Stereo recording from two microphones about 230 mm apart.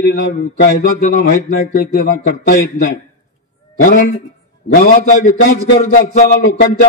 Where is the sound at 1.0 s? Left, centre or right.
Left.